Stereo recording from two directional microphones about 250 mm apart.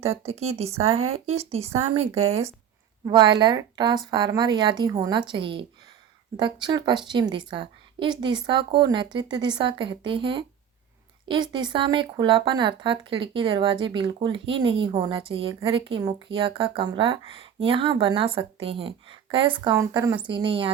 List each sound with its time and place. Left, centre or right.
0.0 s a woman's voice: right